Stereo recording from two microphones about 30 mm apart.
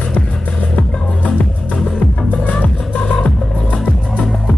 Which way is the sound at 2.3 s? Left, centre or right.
Left.